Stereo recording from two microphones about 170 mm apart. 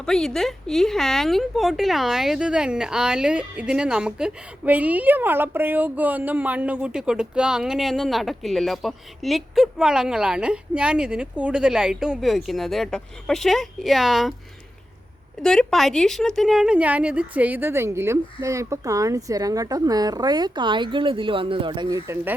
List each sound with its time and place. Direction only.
0.0 s speech: centre (ahead or behind)
15.4 s a woman's voice: centre (ahead or behind); by 22.4 s 15° right (ahead or behind)